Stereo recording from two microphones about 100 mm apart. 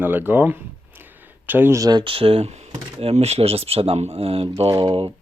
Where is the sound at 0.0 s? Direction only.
20° right (ahead or behind).